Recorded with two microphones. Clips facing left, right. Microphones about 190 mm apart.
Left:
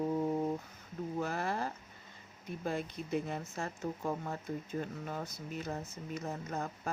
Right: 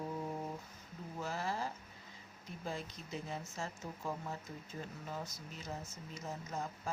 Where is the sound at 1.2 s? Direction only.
60° left (ahead or behind).